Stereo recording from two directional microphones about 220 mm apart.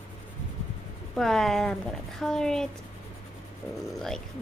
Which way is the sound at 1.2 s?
Centre (ahead or behind).